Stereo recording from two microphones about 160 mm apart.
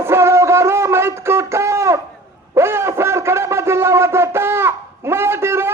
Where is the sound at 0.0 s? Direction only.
15° right (ahead or behind).